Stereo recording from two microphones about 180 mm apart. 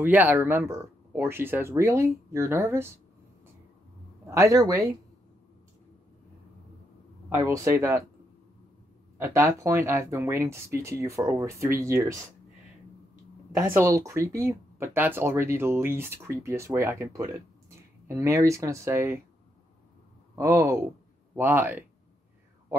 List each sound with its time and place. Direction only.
0.0 s speech: 10° right (ahead or behind)
4.3 s speech: 20° right (ahead or behind)
7.2 s speech: 15° right (ahead or behind)
9.2 s speech: 15° right (ahead or behind)
13.7 s speech: 15° right (ahead or behind)
20.3 s speech: 15° right (ahead or behind)